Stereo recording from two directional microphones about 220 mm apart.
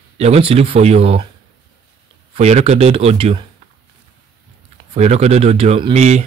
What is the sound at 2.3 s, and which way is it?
Speech, 30° right (ahead or behind).